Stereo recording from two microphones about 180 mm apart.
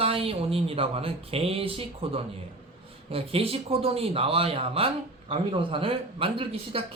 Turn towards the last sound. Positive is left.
turn(degrees=-30)  # may be behind; listen again after turning